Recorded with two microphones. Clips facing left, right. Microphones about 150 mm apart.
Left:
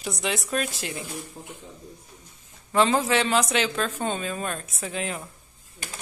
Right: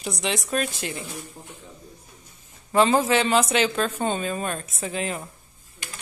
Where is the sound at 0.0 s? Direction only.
Centre (ahead or behind).